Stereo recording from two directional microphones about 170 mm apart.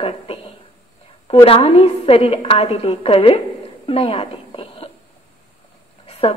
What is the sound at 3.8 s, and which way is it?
Whispering, 35° left (ahead or behind).